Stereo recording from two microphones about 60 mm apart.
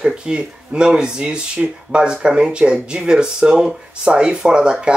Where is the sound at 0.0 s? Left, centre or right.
Centre.